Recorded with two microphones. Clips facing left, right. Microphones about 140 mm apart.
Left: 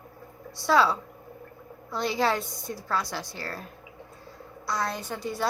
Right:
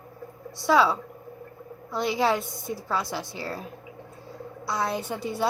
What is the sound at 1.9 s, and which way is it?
Speech, 10° right (ahead or behind).